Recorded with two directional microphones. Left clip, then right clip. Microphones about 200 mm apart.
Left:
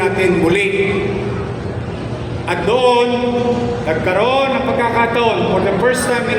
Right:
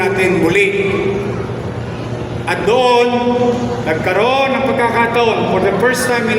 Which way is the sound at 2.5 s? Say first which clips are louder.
Right 1 dB; 35° right (ahead or behind).